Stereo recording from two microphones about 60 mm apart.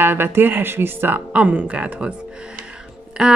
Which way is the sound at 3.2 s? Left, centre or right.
Centre.